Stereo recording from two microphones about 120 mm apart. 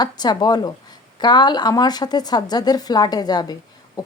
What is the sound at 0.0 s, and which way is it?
A woman's voice, 35° left (ahead or behind).